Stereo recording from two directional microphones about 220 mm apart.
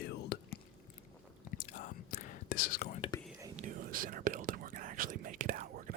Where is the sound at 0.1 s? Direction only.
50° left (ahead or behind).